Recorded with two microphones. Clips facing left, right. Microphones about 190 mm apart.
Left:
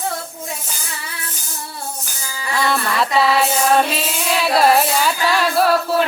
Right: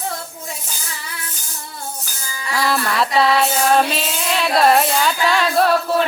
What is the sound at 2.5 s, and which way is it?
Music, centre (ahead or behind).